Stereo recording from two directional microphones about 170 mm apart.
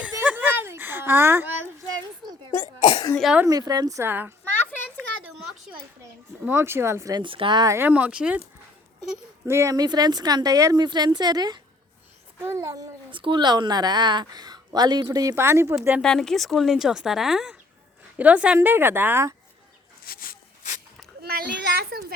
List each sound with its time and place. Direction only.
0.0 s a sound: 10° right (ahead or behind)
2.8 s cough: 25° left (ahead or behind)
3.2 s speech: 5° right (ahead or behind)
3.4 s a child's voice: 20° right (ahead or behind)
6.4 s speech: 15° right (ahead or behind)
9.5 s a child's voice: 15° right (ahead or behind)
16.0 s speech: 5° left (ahead or behind); by 19.3 s 15° right (ahead or behind)
20.1 s speech: 60° left (ahead or behind)
21.2 s a child's voice: 65° right (ahead or behind)